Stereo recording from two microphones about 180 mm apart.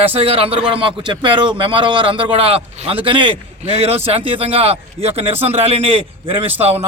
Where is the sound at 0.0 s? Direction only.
30° right (ahead or behind).